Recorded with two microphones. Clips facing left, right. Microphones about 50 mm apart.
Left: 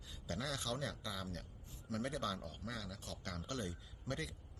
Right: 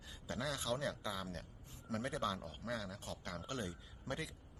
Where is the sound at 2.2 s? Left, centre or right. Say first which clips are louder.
Right 2 dB; right.